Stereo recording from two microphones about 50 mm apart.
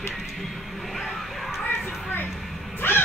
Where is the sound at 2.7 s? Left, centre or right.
Left.